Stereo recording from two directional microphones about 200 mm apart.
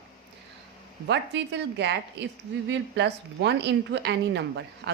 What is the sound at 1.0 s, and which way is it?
A woman's voice, 60° right (ahead or behind).